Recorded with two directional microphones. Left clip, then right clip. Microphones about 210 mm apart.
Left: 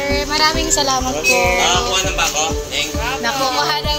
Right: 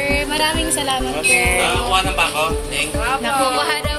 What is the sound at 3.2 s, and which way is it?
Speech, centre (ahead or behind).